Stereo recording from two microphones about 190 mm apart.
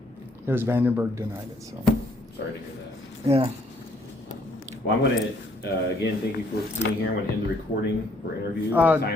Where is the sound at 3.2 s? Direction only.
30° right (ahead or behind).